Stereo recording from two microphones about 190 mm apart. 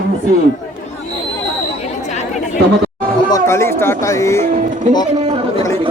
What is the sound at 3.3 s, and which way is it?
Speech, 15° left (ahead or behind).